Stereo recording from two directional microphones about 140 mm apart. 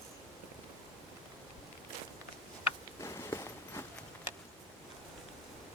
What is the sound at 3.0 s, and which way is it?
Walk, 20° left (ahead or behind).